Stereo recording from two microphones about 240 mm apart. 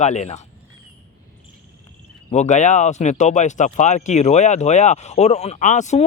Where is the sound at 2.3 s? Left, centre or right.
Left.